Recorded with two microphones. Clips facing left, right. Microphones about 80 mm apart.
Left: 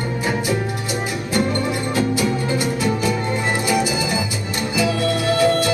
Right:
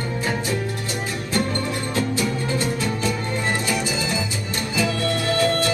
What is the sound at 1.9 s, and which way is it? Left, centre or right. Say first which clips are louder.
Music: left 3 dB; centre.